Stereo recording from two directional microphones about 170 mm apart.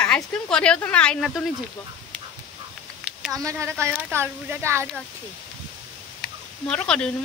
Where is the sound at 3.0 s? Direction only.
Centre (ahead or behind).